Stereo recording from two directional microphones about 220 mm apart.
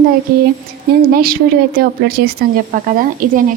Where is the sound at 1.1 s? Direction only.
45° right (ahead or behind).